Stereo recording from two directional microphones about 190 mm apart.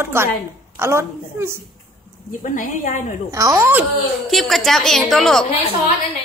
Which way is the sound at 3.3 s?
15° right (ahead or behind).